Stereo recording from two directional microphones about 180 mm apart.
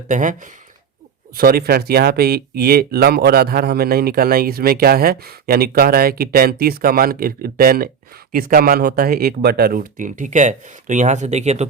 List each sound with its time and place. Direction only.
0.1 s speech: 45° right (ahead or behind)
1.4 s speech: 55° right (ahead or behind); by 11.6 s 40° right (ahead or behind)